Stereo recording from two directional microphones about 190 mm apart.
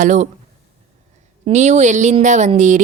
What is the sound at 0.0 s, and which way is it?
Speech, 40° right (ahead or behind).